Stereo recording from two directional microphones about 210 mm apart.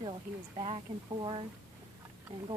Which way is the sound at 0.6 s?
25° right (ahead or behind).